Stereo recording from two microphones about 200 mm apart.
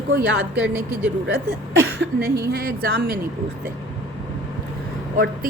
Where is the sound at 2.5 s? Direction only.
50° right (ahead or behind).